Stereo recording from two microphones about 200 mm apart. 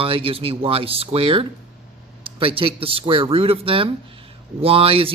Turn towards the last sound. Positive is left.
turn(degrees=-30)  # may be behind; listen again after turning